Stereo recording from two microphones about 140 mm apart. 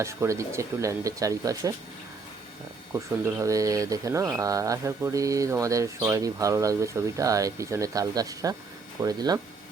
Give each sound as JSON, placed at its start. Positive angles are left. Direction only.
{"t": 0.0, "sound": "speech", "side_deg": -20}
{"t": 2.9, "sound": "speech", "side_deg": -20}